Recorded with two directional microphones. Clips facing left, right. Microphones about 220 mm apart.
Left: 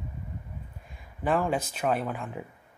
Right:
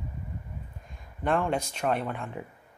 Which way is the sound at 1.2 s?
5° left (ahead or behind).